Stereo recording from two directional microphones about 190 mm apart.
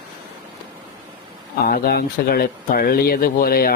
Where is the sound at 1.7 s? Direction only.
55° left (ahead or behind).